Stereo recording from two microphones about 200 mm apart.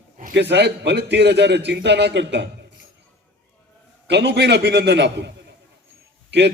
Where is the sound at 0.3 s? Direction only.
60° right (ahead or behind).